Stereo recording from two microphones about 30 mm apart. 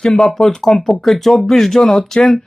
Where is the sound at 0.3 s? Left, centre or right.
Centre.